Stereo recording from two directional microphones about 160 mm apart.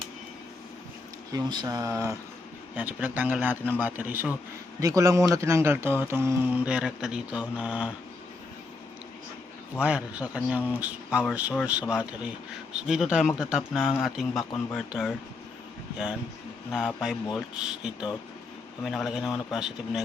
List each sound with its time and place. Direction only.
1.3 s a man's voice: 25° right (ahead or behind)
6.7 s speech: 5° right (ahead or behind)
9.8 s a man's voice: 10° right (ahead or behind)
16.7 s speech: 5° right (ahead or behind)